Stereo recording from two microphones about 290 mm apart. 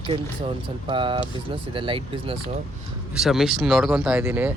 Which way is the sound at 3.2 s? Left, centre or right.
Centre.